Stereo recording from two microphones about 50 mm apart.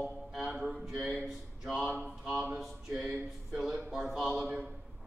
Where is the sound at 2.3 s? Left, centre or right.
Right.